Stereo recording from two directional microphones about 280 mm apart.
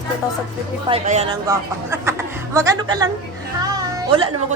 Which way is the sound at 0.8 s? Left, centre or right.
Right.